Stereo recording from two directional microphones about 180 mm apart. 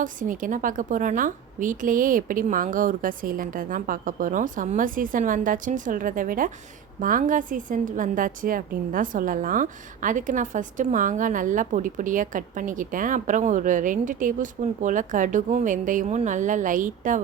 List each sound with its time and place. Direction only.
0.0 s a woman's voice: 50° right (ahead or behind)